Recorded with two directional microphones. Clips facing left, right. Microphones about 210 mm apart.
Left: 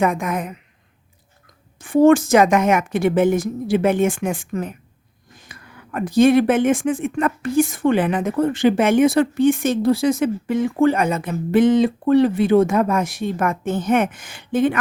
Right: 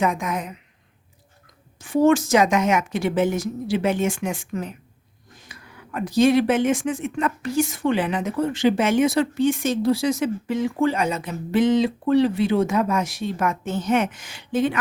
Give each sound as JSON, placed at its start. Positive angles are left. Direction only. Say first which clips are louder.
{"t": 0.0, "sound": "a woman's voice", "louder": "left 3 dB", "side_deg": 55}
{"t": 1.8, "sound": "speech", "louder": "left 4 dB", "side_deg": 55}